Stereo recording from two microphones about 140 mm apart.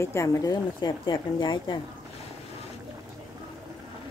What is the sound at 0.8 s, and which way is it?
Speech, 35° left (ahead or behind).